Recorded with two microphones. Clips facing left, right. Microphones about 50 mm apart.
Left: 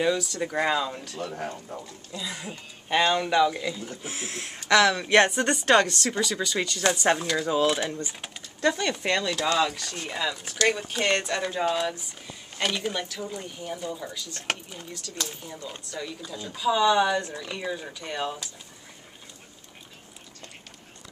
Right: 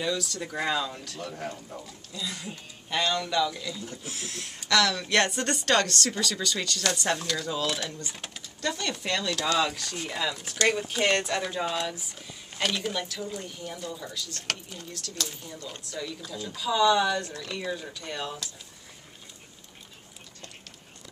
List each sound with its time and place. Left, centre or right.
0.2 s speech: centre
7.2 s speech: centre
8.5 s speech: left